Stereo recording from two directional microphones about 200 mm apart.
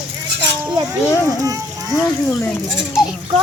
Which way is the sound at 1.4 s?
15° right (ahead or behind).